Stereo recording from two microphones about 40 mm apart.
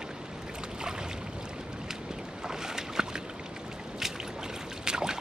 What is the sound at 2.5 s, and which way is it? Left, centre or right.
Boat, centre.